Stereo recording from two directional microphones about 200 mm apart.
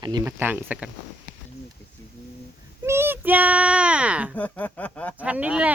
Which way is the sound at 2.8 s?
10° right (ahead or behind).